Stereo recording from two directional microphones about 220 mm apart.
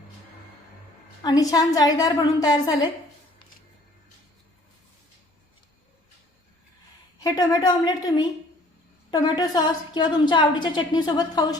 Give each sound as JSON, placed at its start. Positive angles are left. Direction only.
{"t": 1.2, "sound": "a woman's voice", "side_deg": 15}
{"t": 7.2, "sound": "a woman's voice", "side_deg": 15}